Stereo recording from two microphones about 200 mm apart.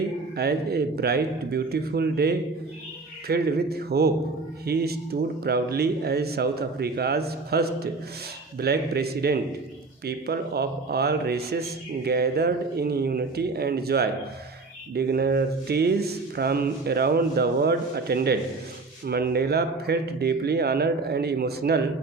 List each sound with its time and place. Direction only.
0.3 s speech: 50° right (ahead or behind)